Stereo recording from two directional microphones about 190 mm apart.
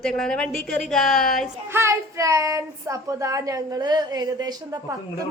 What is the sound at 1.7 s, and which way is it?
A child's voice, 15° right (ahead or behind).